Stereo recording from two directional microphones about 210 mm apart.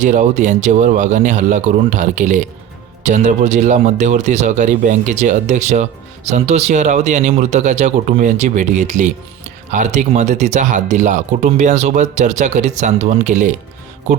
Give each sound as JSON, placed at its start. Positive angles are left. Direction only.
{"t": 0.0, "sound": "a man's voice", "side_deg": -35}